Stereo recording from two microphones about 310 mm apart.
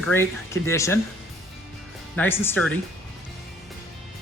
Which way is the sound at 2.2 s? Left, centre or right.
Centre.